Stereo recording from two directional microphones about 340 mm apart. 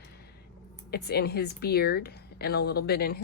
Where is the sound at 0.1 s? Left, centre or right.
Left.